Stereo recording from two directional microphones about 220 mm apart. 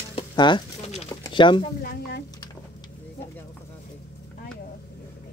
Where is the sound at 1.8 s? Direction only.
45° left (ahead or behind).